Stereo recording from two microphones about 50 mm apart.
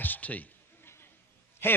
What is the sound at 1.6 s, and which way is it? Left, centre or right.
Speech, left.